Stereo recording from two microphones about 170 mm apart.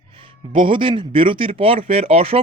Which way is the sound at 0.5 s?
30° right (ahead or behind).